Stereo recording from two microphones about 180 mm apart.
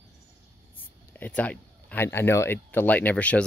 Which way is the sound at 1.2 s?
10° left (ahead or behind).